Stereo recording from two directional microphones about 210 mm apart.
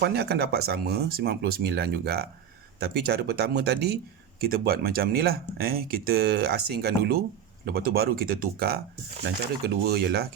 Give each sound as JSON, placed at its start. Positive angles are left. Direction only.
{"t": 0.0, "sound": "speech", "side_deg": -50}